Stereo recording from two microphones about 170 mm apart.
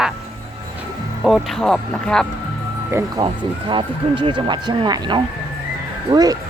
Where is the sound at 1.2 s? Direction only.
Centre (ahead or behind).